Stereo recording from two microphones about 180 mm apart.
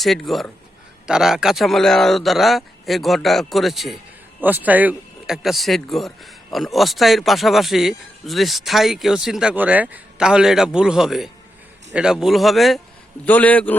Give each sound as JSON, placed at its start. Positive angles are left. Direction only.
{"t": 0.0, "sound": "a man's voice", "side_deg": 0}